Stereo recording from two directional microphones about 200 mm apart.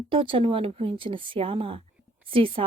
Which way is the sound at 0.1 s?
25° right (ahead or behind).